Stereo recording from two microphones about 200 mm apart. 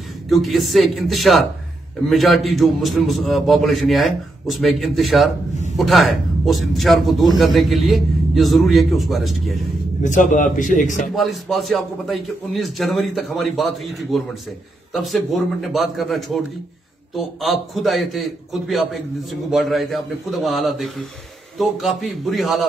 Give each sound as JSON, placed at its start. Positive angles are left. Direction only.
{"t": 0.3, "sound": "a man's voice", "side_deg": 0}
{"t": 10.0, "sound": "a man's voice", "side_deg": 40}
{"t": 11.1, "sound": "a man's voice", "side_deg": 0}